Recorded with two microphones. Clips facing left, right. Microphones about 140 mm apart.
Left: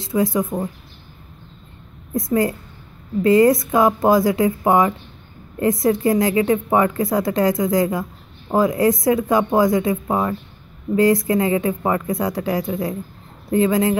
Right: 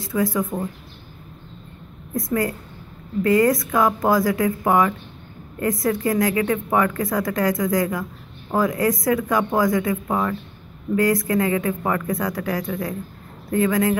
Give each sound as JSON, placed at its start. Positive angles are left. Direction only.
{"t": 0.0, "sound": "speech", "side_deg": 25}
{"t": 2.1, "sound": "speech", "side_deg": 25}